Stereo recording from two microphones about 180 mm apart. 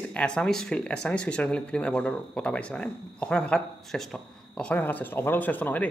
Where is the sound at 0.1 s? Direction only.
5° left (ahead or behind).